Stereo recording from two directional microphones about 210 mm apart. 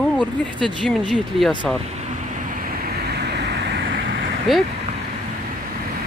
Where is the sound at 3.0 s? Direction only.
50° right (ahead or behind).